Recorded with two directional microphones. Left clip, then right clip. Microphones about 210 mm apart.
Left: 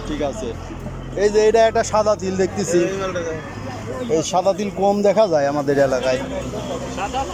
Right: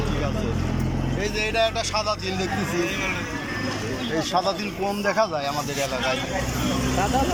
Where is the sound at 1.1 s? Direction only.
25° left (ahead or behind).